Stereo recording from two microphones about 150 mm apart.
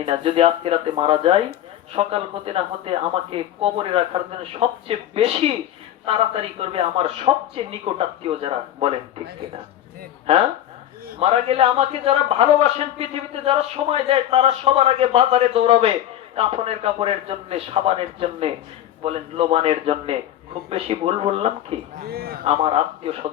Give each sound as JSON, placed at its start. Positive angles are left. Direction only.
{"t": 0.1, "sound": "speech", "side_deg": -40}
{"t": 11.2, "sound": "speech", "side_deg": -40}
{"t": 22.0, "sound": "a man's voice", "side_deg": -90}
{"t": 22.4, "sound": "speech", "side_deg": -40}